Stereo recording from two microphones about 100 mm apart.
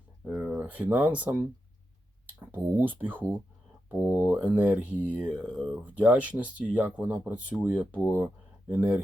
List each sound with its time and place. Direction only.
0.3 s speech: 10° right (ahead or behind)
2.5 s speech: 20° right (ahead or behind)
5.5 s speech: 5° left (ahead or behind)
5.9 s speech: 15° right (ahead or behind)